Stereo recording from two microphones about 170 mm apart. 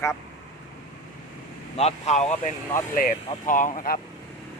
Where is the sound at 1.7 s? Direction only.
40° left (ahead or behind).